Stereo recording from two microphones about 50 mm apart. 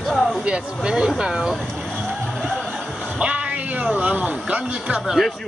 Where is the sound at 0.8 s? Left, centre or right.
Centre.